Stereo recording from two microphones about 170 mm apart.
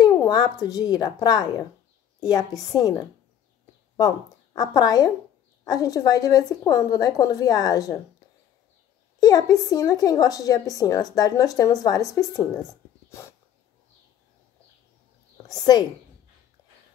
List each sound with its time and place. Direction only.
0.0 s a woman's voice: 25° left (ahead or behind)
4.6 s a woman's voice: 25° left (ahead or behind)
9.2 s a woman's voice: 20° left (ahead or behind)
15.4 s a woman's voice: 20° left (ahead or behind)